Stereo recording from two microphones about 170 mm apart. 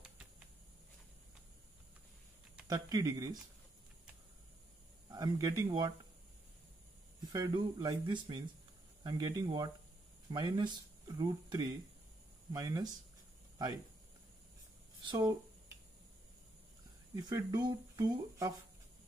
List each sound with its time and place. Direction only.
2.7 s speech: 20° right (ahead or behind)
5.1 s speech: 20° right (ahead or behind)
7.3 s speech: 25° right (ahead or behind)
15.0 s speech: 25° right (ahead or behind)
17.1 s speech: 25° right (ahead or behind)